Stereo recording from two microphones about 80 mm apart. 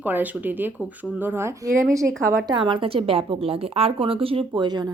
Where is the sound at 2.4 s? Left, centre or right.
Right.